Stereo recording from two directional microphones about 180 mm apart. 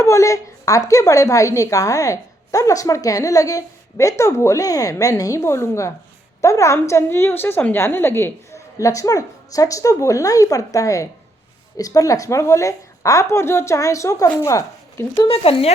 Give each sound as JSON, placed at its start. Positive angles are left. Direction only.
{"t": 0.0, "sound": "a woman's voice", "side_deg": 15}
{"t": 15.3, "sound": "speech", "side_deg": 30}